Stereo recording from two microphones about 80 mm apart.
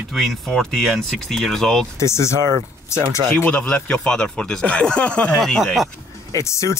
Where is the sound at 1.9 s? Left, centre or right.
Left.